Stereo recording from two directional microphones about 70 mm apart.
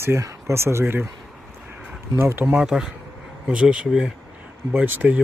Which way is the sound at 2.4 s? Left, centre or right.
Centre.